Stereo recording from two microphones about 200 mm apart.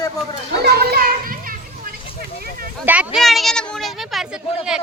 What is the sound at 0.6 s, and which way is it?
Children playing, 50° right (ahead or behind).